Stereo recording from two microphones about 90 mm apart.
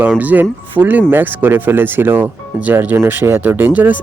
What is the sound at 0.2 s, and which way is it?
Speech, 20° right (ahead or behind).